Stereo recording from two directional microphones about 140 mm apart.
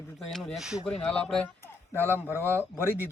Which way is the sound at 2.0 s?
15° left (ahead or behind).